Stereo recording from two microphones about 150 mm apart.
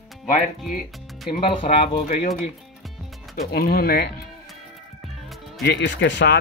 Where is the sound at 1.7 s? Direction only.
60° left (ahead or behind).